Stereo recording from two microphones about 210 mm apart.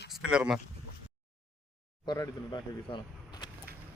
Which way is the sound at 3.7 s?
50° right (ahead or behind).